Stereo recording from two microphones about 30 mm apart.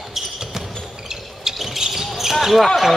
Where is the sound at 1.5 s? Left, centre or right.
Centre.